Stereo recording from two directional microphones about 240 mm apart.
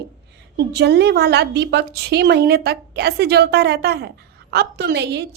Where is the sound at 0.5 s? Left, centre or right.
Right.